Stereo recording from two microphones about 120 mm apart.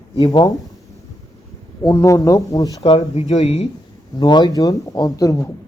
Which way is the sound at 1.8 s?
25° left (ahead or behind).